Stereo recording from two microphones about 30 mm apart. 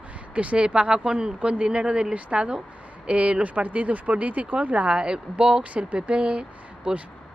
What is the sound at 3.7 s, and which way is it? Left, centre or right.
Speech, right.